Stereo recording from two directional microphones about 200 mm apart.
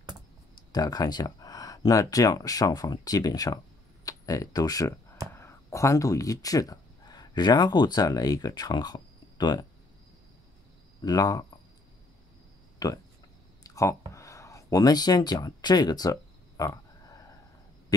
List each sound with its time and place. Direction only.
0.7 s speech: 20° left (ahead or behind)
11.0 s speech: 20° left (ahead or behind)
12.7 s a sound: 20° left (ahead or behind)